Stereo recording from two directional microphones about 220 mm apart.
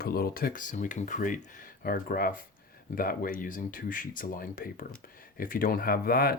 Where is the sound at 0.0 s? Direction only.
45° left (ahead or behind).